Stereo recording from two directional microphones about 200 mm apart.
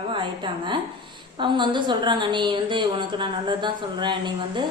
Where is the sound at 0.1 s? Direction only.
25° right (ahead or behind).